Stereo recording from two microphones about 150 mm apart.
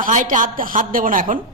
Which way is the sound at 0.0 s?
60° right (ahead or behind).